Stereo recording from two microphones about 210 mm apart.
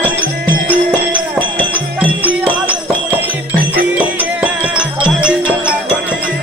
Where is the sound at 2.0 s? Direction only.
5° right (ahead or behind).